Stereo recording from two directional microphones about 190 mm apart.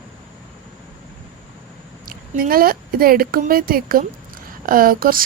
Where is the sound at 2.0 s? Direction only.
50° right (ahead or behind).